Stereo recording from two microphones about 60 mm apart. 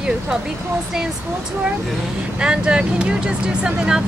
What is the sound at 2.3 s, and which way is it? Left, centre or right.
Speech, centre.